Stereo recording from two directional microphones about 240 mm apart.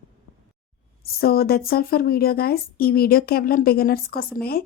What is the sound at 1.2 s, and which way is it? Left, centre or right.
A woman's voice, left.